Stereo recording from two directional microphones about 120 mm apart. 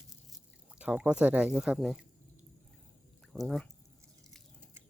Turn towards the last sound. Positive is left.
turn(degrees=0)  # may be behind; listen again after turning